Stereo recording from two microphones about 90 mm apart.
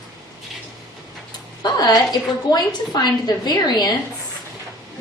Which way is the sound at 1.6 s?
50° left (ahead or behind).